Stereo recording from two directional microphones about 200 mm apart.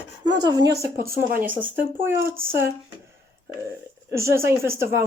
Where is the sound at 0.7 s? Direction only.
50° right (ahead or behind).